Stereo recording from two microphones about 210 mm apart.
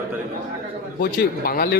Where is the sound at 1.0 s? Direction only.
45° left (ahead or behind).